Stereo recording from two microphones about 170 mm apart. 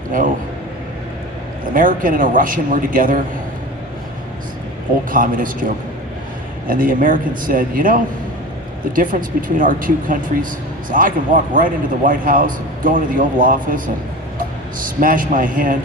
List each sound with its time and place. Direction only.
0.1 s a man's voice: 55° right (ahead or behind)
1.7 s a man's voice: 55° right (ahead or behind)
5.1 s a man's voice: 55° right (ahead or behind)
9.1 s a man's voice: 50° right (ahead or behind)